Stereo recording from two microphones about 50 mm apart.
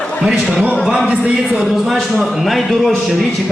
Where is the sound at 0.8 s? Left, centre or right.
Centre.